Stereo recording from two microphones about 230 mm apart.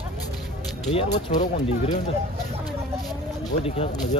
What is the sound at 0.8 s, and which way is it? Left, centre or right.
Speech, left.